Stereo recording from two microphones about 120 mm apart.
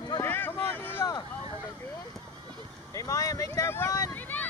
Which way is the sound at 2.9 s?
25° left (ahead or behind).